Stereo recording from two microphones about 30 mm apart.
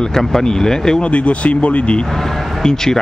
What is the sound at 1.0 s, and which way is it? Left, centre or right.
Speech, left.